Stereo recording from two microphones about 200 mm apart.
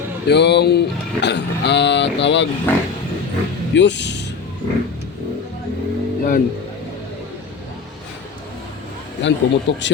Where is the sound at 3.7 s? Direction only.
60° left (ahead or behind).